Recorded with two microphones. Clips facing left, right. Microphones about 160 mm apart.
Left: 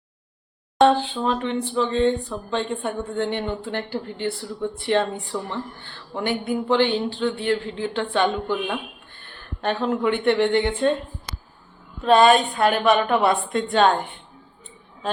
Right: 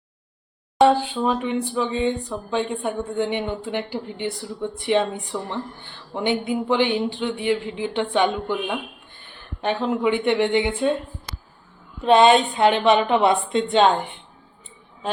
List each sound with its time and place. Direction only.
0.8 s speech: 10° right (ahead or behind)
12.0 s a woman's voice: 20° right (ahead or behind)